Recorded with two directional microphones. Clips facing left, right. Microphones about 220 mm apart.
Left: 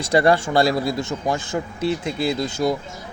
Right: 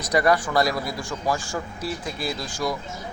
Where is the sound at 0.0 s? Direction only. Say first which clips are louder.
Left 4 dB; 30° left (ahead or behind).